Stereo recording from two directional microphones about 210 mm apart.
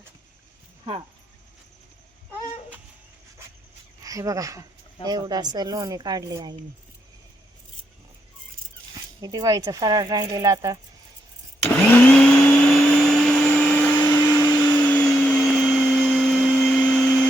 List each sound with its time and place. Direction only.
4.0 s speech: 15° right (ahead or behind)
9.2 s speech: 20° right (ahead or behind)
11.7 s vacuum cleaner: 5° left (ahead or behind)